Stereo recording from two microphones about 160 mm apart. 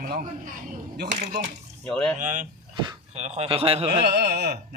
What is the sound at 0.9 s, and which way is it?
Speech, 90° right.